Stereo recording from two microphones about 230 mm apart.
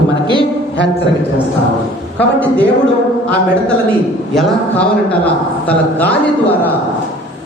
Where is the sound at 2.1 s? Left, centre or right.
Centre.